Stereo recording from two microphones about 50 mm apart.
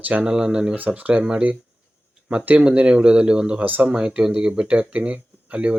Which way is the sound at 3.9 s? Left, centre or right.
Centre.